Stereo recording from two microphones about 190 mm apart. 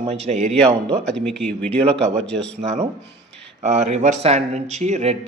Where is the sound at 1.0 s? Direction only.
5° left (ahead or behind).